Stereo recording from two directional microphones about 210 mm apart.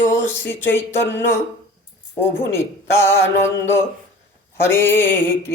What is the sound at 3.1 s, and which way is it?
Speech, 10° left (ahead or behind).